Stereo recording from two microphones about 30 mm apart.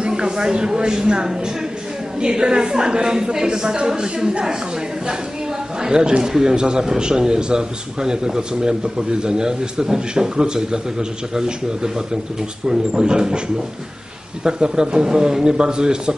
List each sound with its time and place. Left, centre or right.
0.2 s speech: right
5.8 s speech: right
14.4 s speech: right